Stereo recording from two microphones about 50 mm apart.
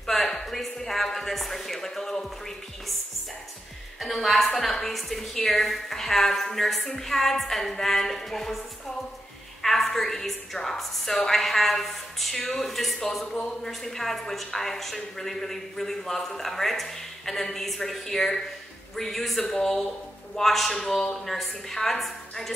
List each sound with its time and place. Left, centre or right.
0.0 s a sound: centre
4.0 s a woman's voice: centre
9.6 s a woman's voice: centre
13.2 s a woman's voice: centre
13.7 s a woman's voice: centre